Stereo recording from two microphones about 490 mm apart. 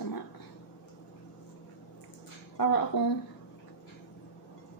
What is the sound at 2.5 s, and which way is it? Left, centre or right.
Speech, left.